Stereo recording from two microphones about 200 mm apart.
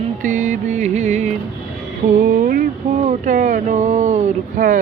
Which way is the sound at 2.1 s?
40° right (ahead or behind).